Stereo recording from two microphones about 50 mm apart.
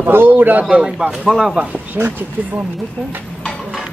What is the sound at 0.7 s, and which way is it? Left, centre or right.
Speech, centre.